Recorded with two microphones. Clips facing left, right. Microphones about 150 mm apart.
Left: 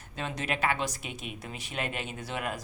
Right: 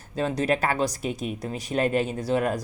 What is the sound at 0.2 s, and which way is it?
Speech, 40° right (ahead or behind).